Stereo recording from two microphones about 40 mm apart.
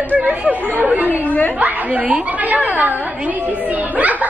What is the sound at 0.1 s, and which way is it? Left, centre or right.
Speech, right.